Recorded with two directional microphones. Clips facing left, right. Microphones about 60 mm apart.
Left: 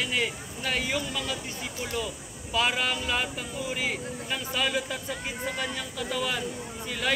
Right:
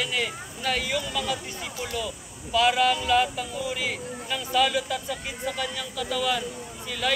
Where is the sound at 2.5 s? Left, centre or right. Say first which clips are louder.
Right 6 dB; centre.